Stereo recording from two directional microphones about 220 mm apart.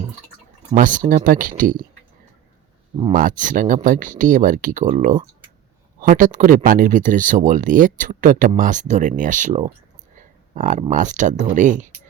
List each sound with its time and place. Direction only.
0.8 s speech: 35° right (ahead or behind)
3.1 s speech: 40° right (ahead or behind)
10.2 s a sound: 35° right (ahead or behind)
10.9 s speech: 35° right (ahead or behind)